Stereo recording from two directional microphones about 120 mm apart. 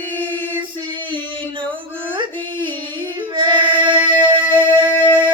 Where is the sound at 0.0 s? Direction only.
15° left (ahead or behind).